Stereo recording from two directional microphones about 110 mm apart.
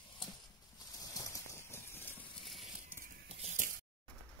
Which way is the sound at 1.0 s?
30° left (ahead or behind).